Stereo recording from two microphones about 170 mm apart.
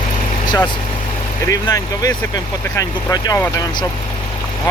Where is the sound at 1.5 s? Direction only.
20° left (ahead or behind).